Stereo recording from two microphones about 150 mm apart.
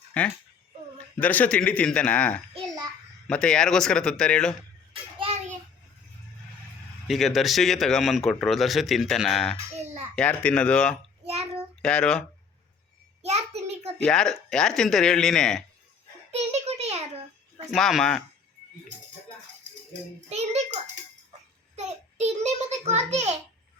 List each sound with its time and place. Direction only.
0.1 s a man's voice: 10° left (ahead or behind)
5.2 s hands: 45° right (ahead or behind)
7.1 s a man's voice: centre (ahead or behind)
9.7 s a sound: 45° right (ahead or behind)
10.2 s a man's voice: 10° left (ahead or behind)
11.3 s child singing: 45° right (ahead or behind)
11.8 s a man's voice: 5° left (ahead or behind)
13.2 s a sound: 45° right (ahead or behind)
14.0 s a man's voice: 5° left (ahead or behind)
16.3 s a sound: 45° right (ahead or behind)
17.7 s a man's voice: centre (ahead or behind)
19.9 s a child's voice: 45° right (ahead or behind)
21.8 s a sound: 50° right (ahead or behind)